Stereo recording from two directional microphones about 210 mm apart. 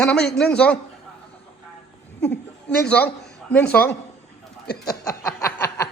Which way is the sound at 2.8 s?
10° left (ahead or behind).